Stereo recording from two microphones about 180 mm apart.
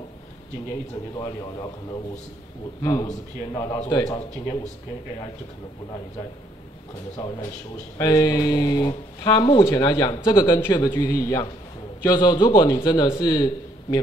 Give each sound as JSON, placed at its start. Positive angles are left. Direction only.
{"t": 1.2, "sound": "speech", "side_deg": 20}
{"t": 8.0, "sound": "speech", "side_deg": 20}